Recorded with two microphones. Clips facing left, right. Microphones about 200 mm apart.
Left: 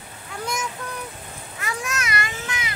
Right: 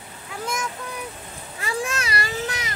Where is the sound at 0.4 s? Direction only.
Centre (ahead or behind).